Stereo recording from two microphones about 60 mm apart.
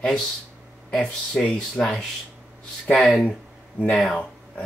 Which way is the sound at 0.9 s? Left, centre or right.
Centre.